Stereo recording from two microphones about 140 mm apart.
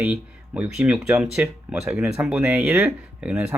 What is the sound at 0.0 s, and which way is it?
Speech, 10° right (ahead or behind).